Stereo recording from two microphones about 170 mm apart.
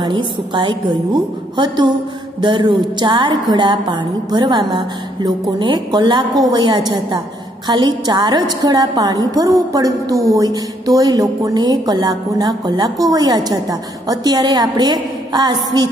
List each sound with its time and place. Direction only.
0.0 s a woman's voice: 30° right (ahead or behind)